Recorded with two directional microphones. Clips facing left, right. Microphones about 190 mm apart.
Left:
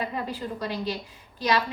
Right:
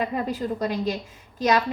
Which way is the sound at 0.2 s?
40° right (ahead or behind).